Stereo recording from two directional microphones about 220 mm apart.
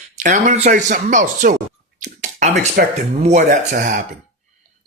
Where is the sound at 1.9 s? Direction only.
35° right (ahead or behind).